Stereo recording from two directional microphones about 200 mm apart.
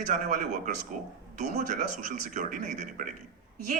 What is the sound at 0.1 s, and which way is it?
Speech, 40° right (ahead or behind).